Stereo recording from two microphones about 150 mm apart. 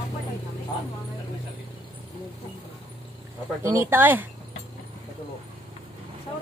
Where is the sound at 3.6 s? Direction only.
15° right (ahead or behind).